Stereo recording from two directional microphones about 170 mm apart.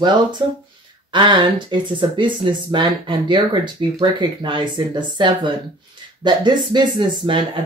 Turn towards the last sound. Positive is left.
turn(degrees=-25)  # may be behind; listen again after turning